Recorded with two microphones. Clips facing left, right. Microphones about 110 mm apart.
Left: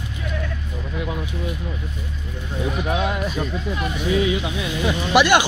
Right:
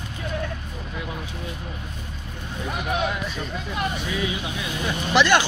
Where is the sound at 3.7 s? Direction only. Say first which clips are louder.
Left 1 dB; 35° right (ahead or behind).